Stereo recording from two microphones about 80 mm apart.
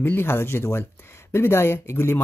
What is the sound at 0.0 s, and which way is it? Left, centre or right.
Speech, left.